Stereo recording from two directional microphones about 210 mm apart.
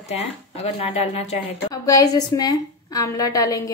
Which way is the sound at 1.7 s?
15° left (ahead or behind).